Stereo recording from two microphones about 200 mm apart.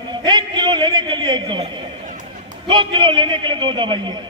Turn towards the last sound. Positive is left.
turn(degrees=-25)  # may be behind; listen again after turning